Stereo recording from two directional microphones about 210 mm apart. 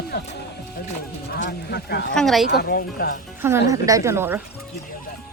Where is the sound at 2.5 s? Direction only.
45° left (ahead or behind).